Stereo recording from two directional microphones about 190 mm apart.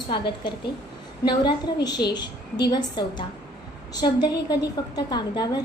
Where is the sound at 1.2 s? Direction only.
25° left (ahead or behind).